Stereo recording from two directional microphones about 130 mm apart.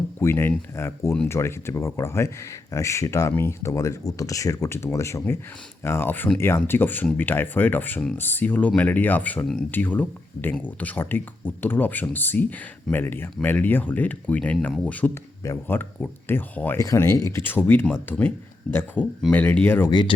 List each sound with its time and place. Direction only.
0.2 s speech: 20° left (ahead or behind)
19.9 s speech: 35° left (ahead or behind)